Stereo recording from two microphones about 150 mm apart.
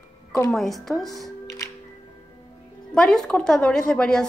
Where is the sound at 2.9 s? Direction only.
5° left (ahead or behind).